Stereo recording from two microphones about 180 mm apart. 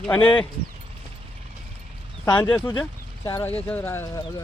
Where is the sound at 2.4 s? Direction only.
15° left (ahead or behind).